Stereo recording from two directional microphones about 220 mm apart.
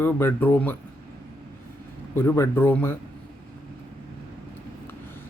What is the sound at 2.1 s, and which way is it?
Speech, 10° left (ahead or behind).